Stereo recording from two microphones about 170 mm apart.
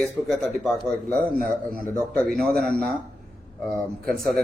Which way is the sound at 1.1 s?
55° right (ahead or behind).